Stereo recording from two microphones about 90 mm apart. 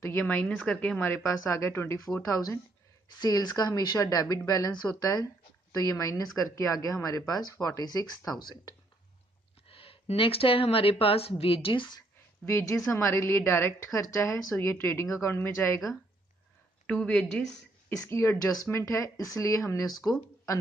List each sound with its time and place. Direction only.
0.0 s speech: 30° left (ahead or behind)
0.3 s a woman's voice: 15° left (ahead or behind)
1.0 s speech: 30° left (ahead or behind)
3.1 s a woman's voice: 45° left (ahead or behind)
9.7 s speech: 90° left; by 12.0 s 65° left (ahead or behind)
12.4 s speech: 35° left (ahead or behind)
16.8 s a woman's voice: 10° left (ahead or behind)
18.1 s speech: 30° left (ahead or behind)